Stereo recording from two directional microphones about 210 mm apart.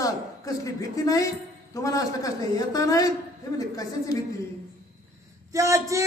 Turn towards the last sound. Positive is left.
turn(degrees=-15)  # may be behind; listen again after turning